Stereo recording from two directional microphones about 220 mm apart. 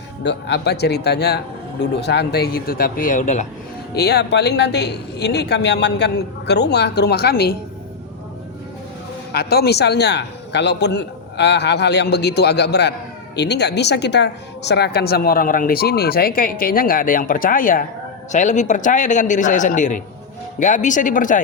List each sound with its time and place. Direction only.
0.2 s a woman's voice: 55° left (ahead or behind); by 3.4 s 35° left (ahead or behind)
3.9 s a woman's voice: 50° left (ahead or behind)
9.3 s a woman's voice: 45° left (ahead or behind)